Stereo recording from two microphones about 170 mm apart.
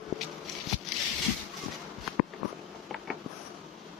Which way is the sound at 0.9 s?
Centre (ahead or behind).